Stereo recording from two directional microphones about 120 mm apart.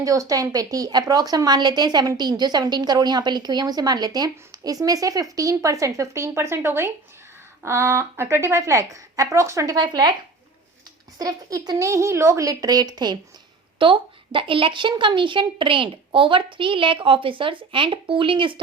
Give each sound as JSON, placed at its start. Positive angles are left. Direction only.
{"t": 0.0, "sound": "a woman's voice", "side_deg": -30}
{"t": 11.2, "sound": "a woman's voice", "side_deg": -30}